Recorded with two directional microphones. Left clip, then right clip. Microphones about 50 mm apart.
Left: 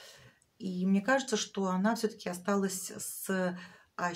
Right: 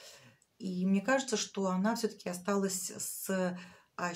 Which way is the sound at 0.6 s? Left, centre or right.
Left.